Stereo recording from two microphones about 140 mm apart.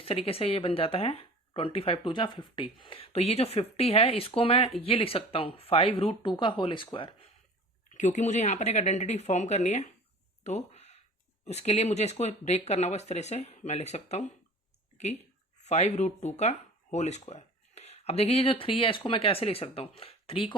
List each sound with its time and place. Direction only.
0.0 s speech: 45° left (ahead or behind)
7.9 s speech: 55° left (ahead or behind)
10.4 s a sound: 50° left (ahead or behind)
11.4 s speech: 50° left (ahead or behind)
15.6 s speech: 50° left (ahead or behind)